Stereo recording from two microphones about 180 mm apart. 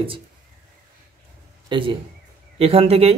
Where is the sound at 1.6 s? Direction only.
25° right (ahead or behind).